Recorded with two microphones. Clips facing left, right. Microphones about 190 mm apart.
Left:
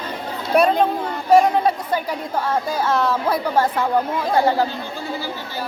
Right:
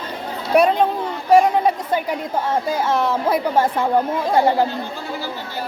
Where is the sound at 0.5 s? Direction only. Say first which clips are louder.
Right 1 dB; 15° right (ahead or behind).